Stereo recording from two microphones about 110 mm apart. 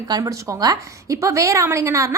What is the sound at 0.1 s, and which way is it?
A woman's voice, 30° right (ahead or behind).